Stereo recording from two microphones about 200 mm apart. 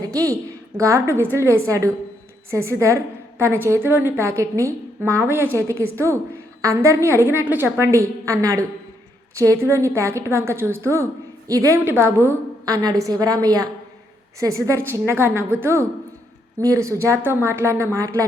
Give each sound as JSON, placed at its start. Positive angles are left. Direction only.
{"t": 0.0, "sound": "a woman's voice", "side_deg": -15}